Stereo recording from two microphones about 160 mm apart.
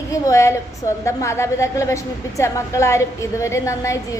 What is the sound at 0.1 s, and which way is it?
A woman's voice, 20° left (ahead or behind).